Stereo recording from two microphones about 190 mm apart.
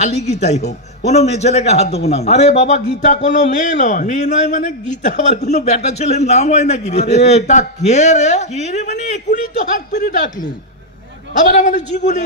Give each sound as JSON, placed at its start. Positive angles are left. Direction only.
{"t": 0.0, "sound": "a man's voice", "side_deg": 35}
{"t": 9.9, "sound": "speech", "side_deg": 50}
{"t": 11.4, "sound": "a man's voice", "side_deg": 40}